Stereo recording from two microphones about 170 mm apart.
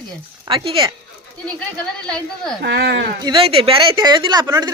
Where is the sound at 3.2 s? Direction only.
30° right (ahead or behind).